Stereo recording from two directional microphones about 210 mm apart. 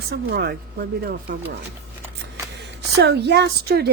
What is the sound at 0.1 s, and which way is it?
A woman's voice, 45° right (ahead or behind).